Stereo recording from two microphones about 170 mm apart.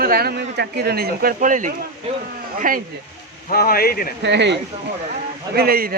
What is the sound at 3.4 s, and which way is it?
Speech, 60° left (ahead or behind).